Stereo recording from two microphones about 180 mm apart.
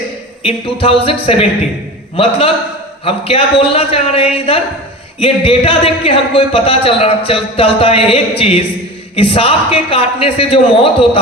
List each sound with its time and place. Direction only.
0.4 s a man's voice: 30° left (ahead or behind)